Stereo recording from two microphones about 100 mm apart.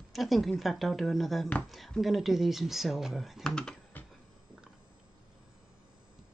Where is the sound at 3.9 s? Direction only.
20° left (ahead or behind).